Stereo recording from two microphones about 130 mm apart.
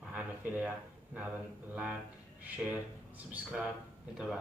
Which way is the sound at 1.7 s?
10° right (ahead or behind).